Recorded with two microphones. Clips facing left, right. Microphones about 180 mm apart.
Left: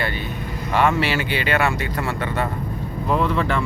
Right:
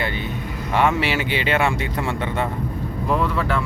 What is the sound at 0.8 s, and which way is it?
Speech, 15° right (ahead or behind).